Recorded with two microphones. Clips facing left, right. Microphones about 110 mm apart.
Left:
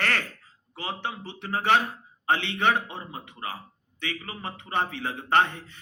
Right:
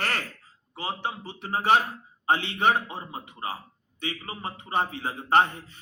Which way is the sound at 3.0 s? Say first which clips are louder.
Right 1 dB; 30° right (ahead or behind).